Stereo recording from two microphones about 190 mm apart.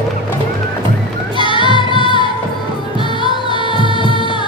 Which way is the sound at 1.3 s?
25° left (ahead or behind).